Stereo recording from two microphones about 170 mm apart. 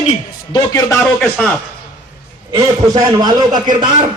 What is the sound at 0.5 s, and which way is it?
Speech, 20° left (ahead or behind).